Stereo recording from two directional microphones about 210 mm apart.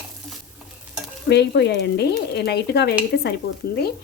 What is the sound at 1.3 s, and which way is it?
Speech, 55° left (ahead or behind).